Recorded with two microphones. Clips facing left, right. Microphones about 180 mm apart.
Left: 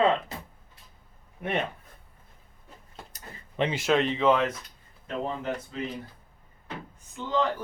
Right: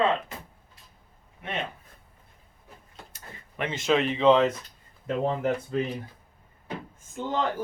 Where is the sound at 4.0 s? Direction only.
15° right (ahead or behind).